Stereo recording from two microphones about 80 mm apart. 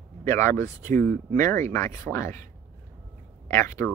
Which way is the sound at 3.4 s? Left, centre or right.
Left.